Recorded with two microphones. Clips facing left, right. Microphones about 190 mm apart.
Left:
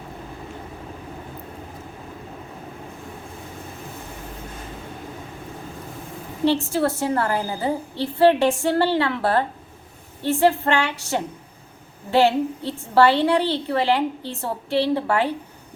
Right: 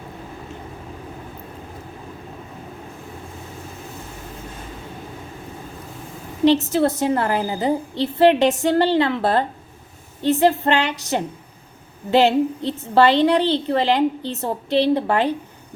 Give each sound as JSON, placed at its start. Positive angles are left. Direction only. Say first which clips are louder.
{"t": 6.7, "sound": "a woman's voice", "louder": "right 3 dB", "side_deg": -20}